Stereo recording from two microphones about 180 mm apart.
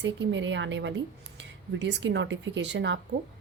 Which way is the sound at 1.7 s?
75° right (ahead or behind).